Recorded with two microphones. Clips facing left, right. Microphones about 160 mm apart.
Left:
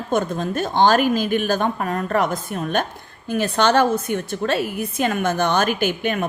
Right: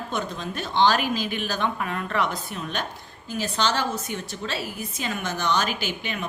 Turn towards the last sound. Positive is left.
turn(degrees=50)  # may be behind; listen again after turning